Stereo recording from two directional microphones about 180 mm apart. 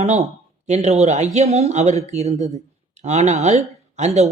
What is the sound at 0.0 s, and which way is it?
Speech, 40° right (ahead or behind).